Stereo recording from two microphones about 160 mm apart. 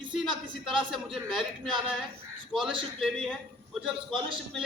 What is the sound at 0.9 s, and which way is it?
Speech, centre (ahead or behind).